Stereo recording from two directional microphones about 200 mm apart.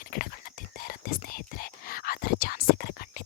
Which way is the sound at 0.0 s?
45° left (ahead or behind).